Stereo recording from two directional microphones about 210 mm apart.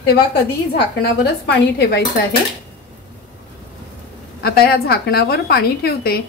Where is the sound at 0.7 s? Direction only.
50° left (ahead or behind).